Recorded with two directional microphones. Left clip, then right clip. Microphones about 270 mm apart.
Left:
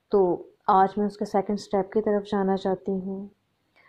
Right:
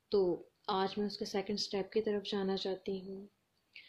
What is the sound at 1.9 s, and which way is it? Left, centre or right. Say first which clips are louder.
Speech: left 9 dB; centre.